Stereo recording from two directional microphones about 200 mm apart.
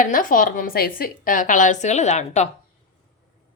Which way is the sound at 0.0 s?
40° left (ahead or behind).